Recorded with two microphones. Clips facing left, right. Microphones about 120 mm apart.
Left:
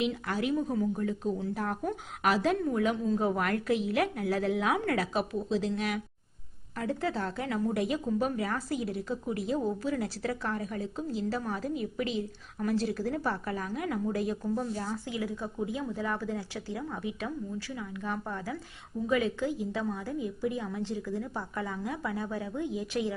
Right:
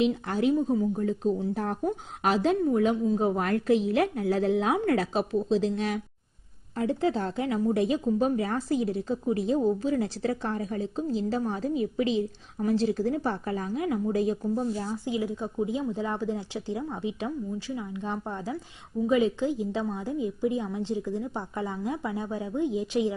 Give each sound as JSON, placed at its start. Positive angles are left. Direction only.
{"t": 0.0, "sound": "speech", "side_deg": -25}
{"t": 1.0, "sound": "speech", "side_deg": -30}